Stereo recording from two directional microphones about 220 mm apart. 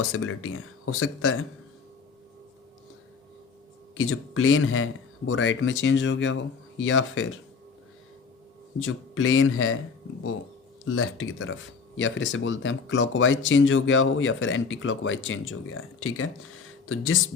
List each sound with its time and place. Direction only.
0.0 s speech: 70° left (ahead or behind)
3.9 s speech: 70° left (ahead or behind)
8.8 s speech: 65° left (ahead or behind)
10.8 s speech: 70° left (ahead or behind)